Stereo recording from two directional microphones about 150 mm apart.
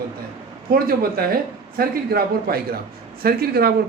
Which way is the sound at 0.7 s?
80° right.